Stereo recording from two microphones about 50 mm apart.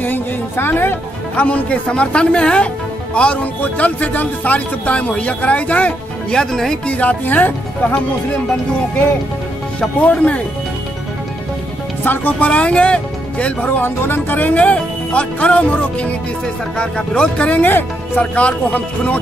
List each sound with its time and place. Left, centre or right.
0.0 s speech: left
1.3 s speech: left
6.3 s speech: centre
6.9 s speech: left
9.8 s speech: left
12.0 s speech: left
13.8 s speech: left
17.6 s speech: left
18.2 s speech: left